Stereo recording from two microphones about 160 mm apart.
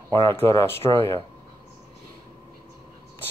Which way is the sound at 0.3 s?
15° left (ahead or behind).